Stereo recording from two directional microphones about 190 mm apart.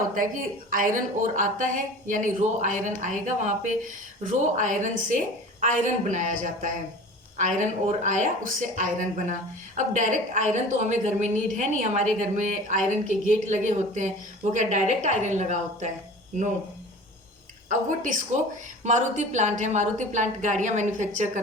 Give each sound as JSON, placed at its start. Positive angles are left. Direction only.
{"t": 0.1, "sound": "speech", "side_deg": -45}
{"t": 17.7, "sound": "speech", "side_deg": -40}